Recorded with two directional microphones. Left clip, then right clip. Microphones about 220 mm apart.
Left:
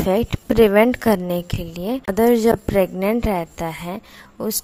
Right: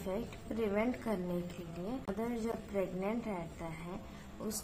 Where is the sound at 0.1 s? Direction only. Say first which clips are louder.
Left 19 dB; 50° left (ahead or behind).